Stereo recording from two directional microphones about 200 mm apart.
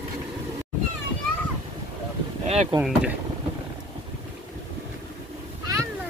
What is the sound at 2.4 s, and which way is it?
Boat, 35° right (ahead or behind).